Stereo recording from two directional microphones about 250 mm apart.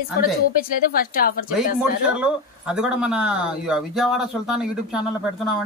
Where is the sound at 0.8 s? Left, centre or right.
Left.